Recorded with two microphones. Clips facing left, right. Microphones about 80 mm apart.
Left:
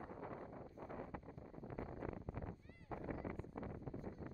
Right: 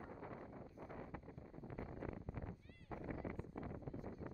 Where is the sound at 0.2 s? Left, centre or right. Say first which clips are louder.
Left 2 dB; left.